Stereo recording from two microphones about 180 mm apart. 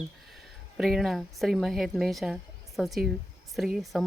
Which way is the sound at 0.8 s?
Centre (ahead or behind).